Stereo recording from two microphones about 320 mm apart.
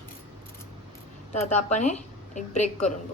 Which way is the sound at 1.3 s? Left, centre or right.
Left.